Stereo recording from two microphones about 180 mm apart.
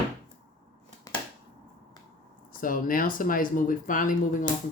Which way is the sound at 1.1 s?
20° left (ahead or behind).